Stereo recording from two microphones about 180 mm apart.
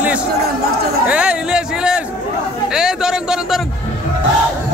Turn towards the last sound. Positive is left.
turn(degrees=-5)  # may be behind; listen again after turning